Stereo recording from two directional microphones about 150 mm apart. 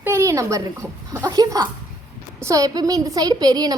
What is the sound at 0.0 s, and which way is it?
A child's voice, 20° right (ahead or behind).